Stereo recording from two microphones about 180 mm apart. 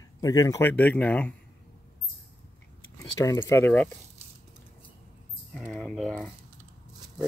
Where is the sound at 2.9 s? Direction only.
20° left (ahead or behind).